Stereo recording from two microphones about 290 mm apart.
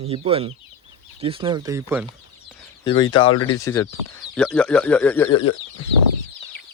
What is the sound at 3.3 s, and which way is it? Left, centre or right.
Speech, left.